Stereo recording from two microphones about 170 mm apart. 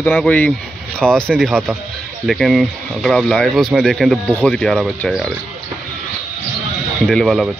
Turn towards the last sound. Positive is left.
turn(degrees=0)  # may be behind; listen again after turning